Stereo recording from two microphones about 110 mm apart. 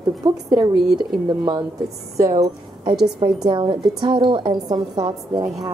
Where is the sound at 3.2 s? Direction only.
45° right (ahead or behind).